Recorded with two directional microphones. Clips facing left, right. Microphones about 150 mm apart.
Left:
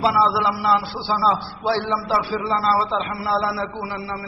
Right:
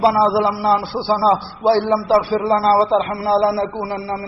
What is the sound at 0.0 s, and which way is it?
A man's voice, 45° right (ahead or behind).